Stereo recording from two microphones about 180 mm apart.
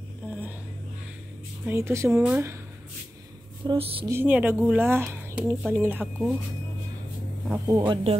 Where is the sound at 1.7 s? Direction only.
15° right (ahead or behind).